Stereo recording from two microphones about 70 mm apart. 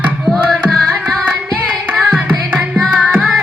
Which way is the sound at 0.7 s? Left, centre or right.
Centre.